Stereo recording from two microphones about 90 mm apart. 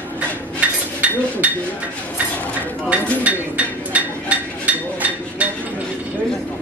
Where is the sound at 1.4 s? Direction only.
15° right (ahead or behind).